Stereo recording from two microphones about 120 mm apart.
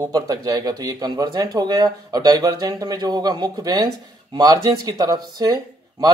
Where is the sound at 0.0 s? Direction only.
30° right (ahead or behind).